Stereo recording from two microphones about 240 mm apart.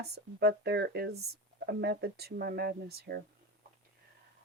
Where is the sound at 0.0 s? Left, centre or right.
Right.